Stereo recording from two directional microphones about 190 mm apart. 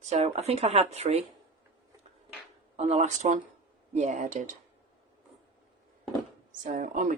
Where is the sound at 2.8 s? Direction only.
35° right (ahead or behind).